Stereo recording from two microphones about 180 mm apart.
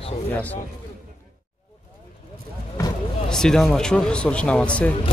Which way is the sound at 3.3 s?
5° left (ahead or behind).